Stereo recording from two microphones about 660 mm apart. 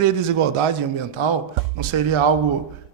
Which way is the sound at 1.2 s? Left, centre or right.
Right.